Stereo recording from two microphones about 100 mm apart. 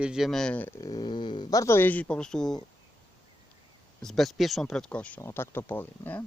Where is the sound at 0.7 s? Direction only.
45° left (ahead or behind).